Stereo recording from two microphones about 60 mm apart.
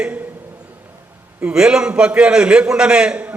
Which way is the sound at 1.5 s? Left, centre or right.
Centre.